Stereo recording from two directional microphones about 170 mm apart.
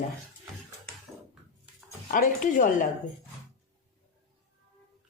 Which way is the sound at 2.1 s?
50° left (ahead or behind).